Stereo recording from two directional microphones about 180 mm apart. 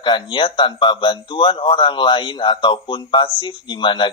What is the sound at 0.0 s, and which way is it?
Speech, 25° left (ahead or behind).